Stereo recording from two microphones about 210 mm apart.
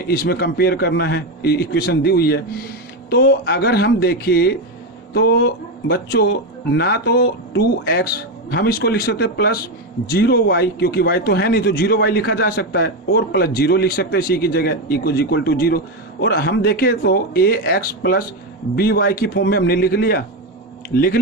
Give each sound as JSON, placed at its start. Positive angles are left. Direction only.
{"t": 0.1, "sound": "a man's voice", "side_deg": 50}